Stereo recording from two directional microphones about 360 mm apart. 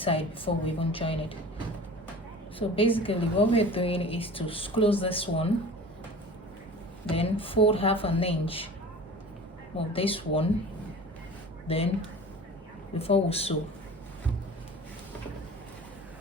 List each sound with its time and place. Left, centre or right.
0.0 s a woman's voice: centre
2.6 s a woman's voice: centre
7.2 s a woman's voice: centre
9.7 s a woman's voice: centre
11.7 s a woman's voice: centre
13.0 s a woman's voice: centre